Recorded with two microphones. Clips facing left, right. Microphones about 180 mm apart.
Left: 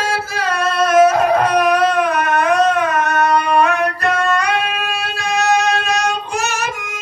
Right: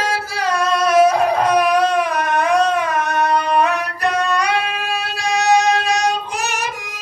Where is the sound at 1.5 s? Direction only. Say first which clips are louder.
Left 1 dB; 10° right (ahead or behind).